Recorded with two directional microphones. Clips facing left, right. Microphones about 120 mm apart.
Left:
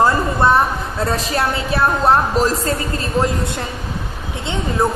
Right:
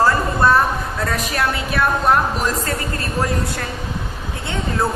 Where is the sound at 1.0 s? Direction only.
30° left (ahead or behind).